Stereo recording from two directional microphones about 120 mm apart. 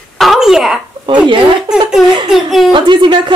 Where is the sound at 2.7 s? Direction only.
40° right (ahead or behind).